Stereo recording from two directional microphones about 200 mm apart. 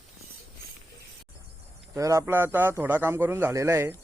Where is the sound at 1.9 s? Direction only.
15° right (ahead or behind).